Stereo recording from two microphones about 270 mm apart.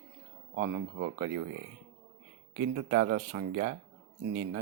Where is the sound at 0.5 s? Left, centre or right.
Right.